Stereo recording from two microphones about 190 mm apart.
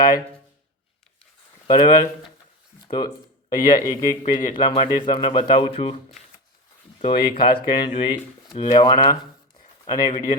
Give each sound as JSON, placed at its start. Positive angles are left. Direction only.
{"t": 1.6, "sound": "speech", "side_deg": 25}